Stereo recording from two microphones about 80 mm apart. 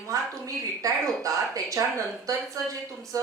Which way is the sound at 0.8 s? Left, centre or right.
Right.